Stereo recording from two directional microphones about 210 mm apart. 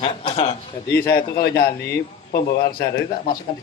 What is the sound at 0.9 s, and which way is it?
A man's voice, 50° left (ahead or behind).